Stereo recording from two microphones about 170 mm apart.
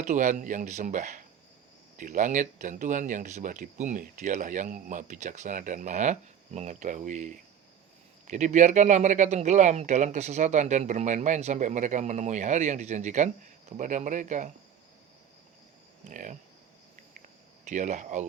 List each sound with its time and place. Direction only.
0.0 s speech: 45° right (ahead or behind)
16.0 s speech: 45° right (ahead or behind)
17.7 s speech: 45° right (ahead or behind)